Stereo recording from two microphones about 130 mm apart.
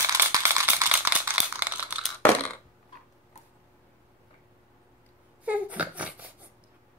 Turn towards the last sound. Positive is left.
turn(degrees=-10)  # may be behind; listen again after turning